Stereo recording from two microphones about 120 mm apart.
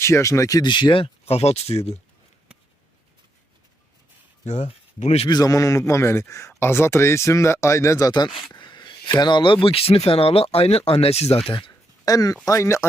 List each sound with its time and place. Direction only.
0.0 s speech: 25° left (ahead or behind); by 2.0 s 60° left (ahead or behind)
4.4 s speech: 75° left (ahead or behind)
5.3 s speech: 30° left (ahead or behind)
8.3 s speech: centre (ahead or behind)
8.5 s speech: 40° left (ahead or behind)
12.0 s speech: 30° left (ahead or behind)